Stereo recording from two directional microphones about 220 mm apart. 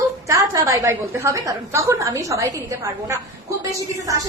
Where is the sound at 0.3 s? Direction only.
15° right (ahead or behind).